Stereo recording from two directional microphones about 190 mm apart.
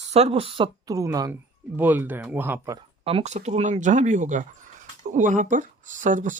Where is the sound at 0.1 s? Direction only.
30° right (ahead or behind); by 2.7 s 10° right (ahead or behind).